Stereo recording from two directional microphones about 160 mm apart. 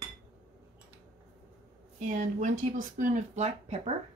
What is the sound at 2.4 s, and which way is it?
Speech, 55° right (ahead or behind).